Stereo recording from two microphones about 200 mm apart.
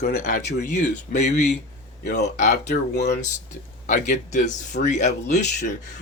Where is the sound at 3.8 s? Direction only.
40° left (ahead or behind).